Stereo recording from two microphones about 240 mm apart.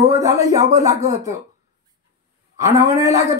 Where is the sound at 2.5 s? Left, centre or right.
Centre.